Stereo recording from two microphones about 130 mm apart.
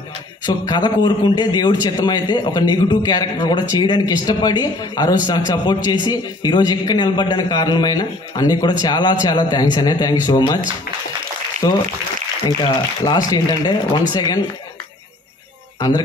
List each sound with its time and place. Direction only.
0.7 s a man's voice: 35° left (ahead or behind)
11.6 s speech: 25° left (ahead or behind)
13.0 s a man's voice: 30° left (ahead or behind)